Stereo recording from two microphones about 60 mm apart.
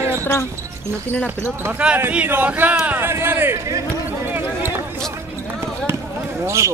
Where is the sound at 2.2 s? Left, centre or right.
Right.